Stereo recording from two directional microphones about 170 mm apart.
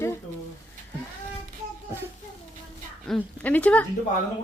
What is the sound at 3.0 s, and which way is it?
Speech, 5° left (ahead or behind).